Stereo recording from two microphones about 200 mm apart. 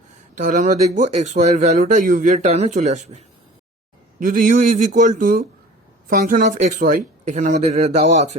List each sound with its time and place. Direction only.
0.3 s speech: 40° right (ahead or behind)
4.2 s speech: 40° right (ahead or behind)